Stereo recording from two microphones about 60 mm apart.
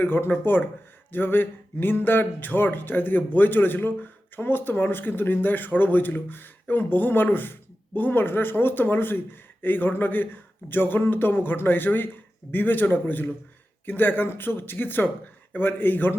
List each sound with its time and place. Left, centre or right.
0.0 s speech: left